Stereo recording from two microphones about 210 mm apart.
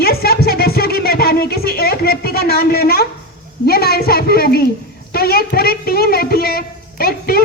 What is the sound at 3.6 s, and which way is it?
A woman's voice, 50° left (ahead or behind).